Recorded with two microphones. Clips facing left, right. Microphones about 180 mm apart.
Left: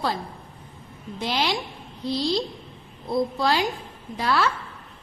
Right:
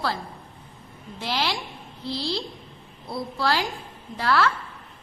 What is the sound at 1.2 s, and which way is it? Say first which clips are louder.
A woman's voice: left 2 dB; 20° left (ahead or behind).